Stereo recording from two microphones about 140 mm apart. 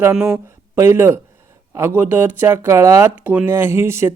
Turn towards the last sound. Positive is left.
turn(degrees=-20)  # may be behind; listen again after turning